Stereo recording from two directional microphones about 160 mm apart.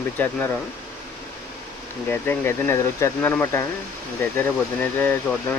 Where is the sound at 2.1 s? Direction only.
15° left (ahead or behind).